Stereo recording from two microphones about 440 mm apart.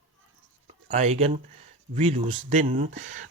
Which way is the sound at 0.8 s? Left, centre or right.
Centre.